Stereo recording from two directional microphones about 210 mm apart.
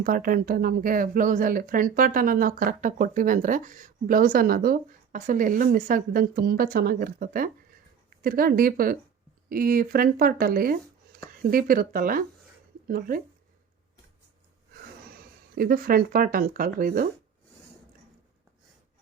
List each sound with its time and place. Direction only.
0.0 s speech: 40° right (ahead or behind)
15.1 s speech: 45° right (ahead or behind)